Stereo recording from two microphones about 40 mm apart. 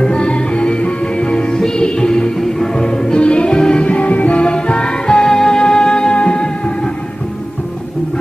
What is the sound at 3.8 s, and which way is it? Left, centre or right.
Music, left.